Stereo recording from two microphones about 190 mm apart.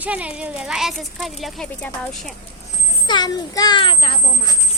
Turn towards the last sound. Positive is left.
turn(degrees=25)  # may be behind; listen again after turning